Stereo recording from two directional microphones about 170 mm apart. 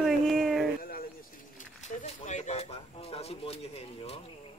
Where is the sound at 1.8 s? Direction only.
45° left (ahead or behind).